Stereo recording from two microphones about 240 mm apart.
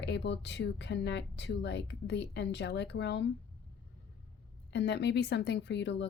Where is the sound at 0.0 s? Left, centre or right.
Left.